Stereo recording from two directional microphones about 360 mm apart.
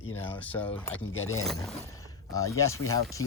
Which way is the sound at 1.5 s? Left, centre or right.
Centre.